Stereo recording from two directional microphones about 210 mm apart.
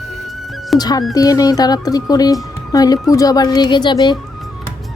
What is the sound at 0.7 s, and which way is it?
A woman's voice, 20° left (ahead or behind).